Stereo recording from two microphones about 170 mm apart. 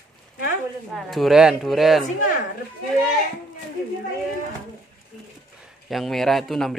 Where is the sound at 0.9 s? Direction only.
Centre (ahead or behind).